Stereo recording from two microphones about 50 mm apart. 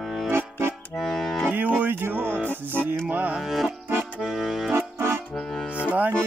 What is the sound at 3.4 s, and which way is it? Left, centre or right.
Music, centre.